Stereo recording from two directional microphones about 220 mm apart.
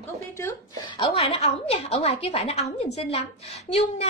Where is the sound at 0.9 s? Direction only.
25° left (ahead or behind).